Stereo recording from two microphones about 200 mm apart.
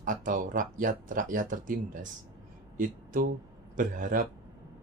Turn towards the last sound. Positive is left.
turn(degrees=-45)  # may be behind; listen again after turning